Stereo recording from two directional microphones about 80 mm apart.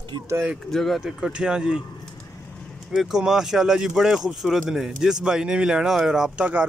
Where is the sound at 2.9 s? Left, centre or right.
Centre.